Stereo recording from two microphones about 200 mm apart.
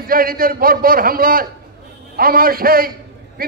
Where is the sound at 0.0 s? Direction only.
45° right (ahead or behind).